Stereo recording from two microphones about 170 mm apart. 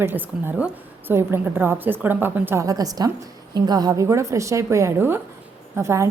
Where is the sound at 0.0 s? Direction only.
10° right (ahead or behind).